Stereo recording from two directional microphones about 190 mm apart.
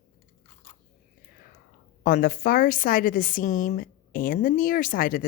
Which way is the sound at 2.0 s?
45° left (ahead or behind).